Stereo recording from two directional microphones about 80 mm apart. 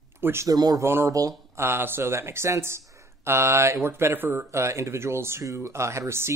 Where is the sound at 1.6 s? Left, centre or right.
Right.